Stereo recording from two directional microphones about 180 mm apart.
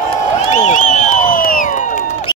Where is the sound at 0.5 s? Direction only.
40° left (ahead or behind).